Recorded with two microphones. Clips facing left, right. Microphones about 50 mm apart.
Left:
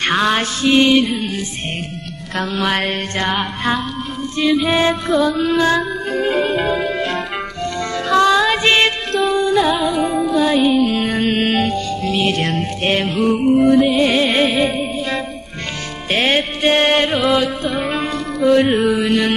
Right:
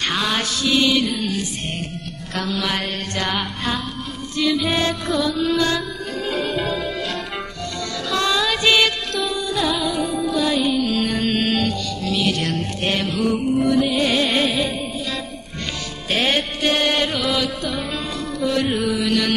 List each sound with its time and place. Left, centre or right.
0.0 s music: left
3.3 s music: left
16.1 s music: left